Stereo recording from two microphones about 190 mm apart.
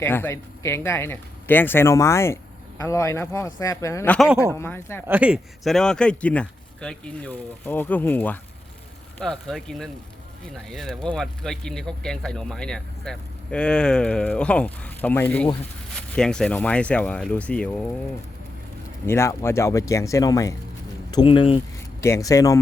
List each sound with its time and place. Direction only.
0.0 s speech: 10° left (ahead or behind)
5.0 s speech: 10° right (ahead or behind)
19.0 s speech: 15° left (ahead or behind)
22.0 s speech: 15° left (ahead or behind)